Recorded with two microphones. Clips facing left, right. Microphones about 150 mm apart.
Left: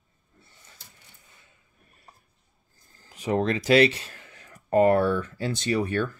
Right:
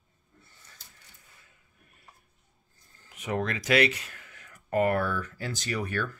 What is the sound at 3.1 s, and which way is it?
Speech, 30° left (ahead or behind).